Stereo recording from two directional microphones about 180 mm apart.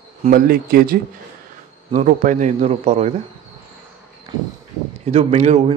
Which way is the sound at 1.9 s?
45° right (ahead or behind).